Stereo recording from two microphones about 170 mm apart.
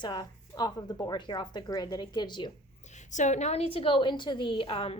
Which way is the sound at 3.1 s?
45° left (ahead or behind).